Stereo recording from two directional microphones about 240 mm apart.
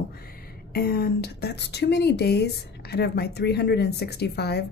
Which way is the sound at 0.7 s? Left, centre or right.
Left.